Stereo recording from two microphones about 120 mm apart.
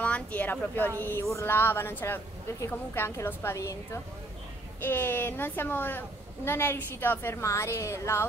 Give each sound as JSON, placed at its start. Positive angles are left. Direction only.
{"t": 0.0, "sound": "a woman's voice", "side_deg": 10}